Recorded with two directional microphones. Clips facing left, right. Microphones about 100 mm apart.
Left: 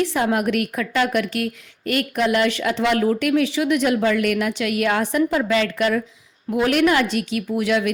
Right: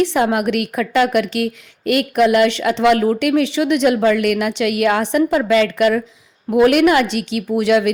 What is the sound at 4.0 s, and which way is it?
A woman's voice, 50° right (ahead or behind).